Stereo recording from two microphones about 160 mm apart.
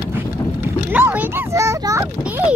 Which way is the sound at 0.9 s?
10° right (ahead or behind).